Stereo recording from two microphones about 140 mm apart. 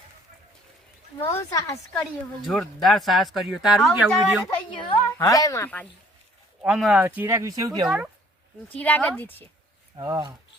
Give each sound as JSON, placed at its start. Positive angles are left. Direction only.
{"t": 1.2, "sound": "speech", "side_deg": 20}
{"t": 2.5, "sound": "speech", "side_deg": 0}
{"t": 4.4, "sound": "a woman's voice", "side_deg": 35}
{"t": 5.1, "sound": "speech", "side_deg": 25}
{"t": 5.6, "sound": "speech", "side_deg": 10}
{"t": 6.6, "sound": "speech", "side_deg": -5}
{"t": 7.9, "sound": "speech", "side_deg": -5}
{"t": 8.7, "sound": "speech", "side_deg": 10}
{"t": 9.9, "sound": "speech", "side_deg": -30}